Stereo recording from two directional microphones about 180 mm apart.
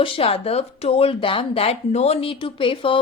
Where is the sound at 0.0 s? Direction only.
30° left (ahead or behind).